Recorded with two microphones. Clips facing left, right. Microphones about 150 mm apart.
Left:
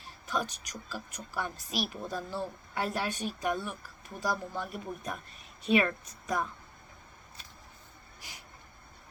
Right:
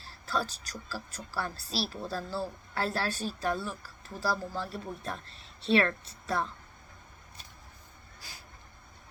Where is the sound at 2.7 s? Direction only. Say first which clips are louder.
Right 1 dB; 15° left (ahead or behind).